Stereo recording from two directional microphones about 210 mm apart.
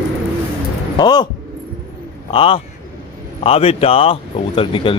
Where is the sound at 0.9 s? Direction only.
20° left (ahead or behind).